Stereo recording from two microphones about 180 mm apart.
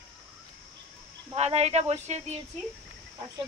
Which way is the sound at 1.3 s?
35° right (ahead or behind).